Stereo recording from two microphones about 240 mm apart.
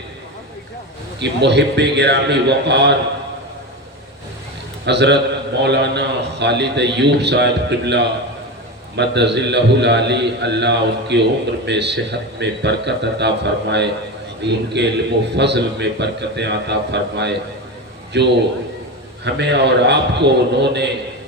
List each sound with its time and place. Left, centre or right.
1.2 s a man's voice: right
4.9 s a man's voice: right